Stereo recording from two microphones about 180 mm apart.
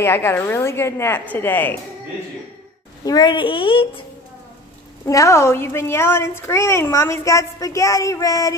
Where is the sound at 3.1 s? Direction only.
25° left (ahead or behind).